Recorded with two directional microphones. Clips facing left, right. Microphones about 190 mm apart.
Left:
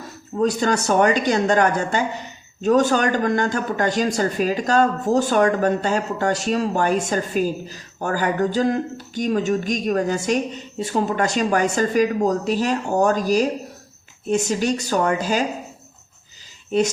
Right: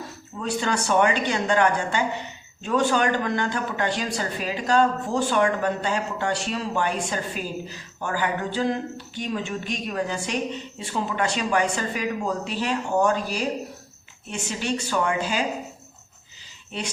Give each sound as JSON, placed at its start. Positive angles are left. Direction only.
{"t": 0.3, "sound": "speech", "side_deg": 40}
{"t": 16.7, "sound": "speech", "side_deg": 45}